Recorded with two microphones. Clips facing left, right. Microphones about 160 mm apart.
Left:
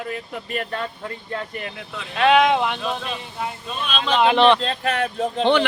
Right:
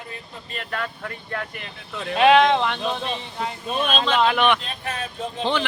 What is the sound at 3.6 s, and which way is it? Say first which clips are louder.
Speech: right 8 dB; 50° right (ahead or behind).